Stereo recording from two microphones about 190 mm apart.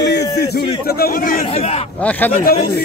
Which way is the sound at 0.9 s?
50° left (ahead or behind).